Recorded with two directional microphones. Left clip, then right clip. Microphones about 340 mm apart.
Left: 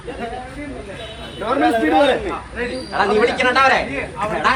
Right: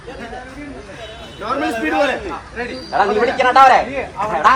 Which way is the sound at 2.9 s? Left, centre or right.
Right.